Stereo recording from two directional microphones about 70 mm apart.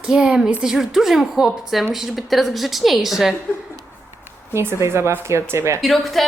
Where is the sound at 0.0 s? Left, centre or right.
Centre.